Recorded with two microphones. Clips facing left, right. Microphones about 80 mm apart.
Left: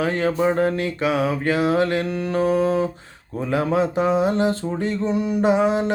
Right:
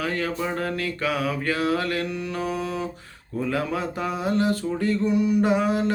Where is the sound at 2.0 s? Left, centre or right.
Left.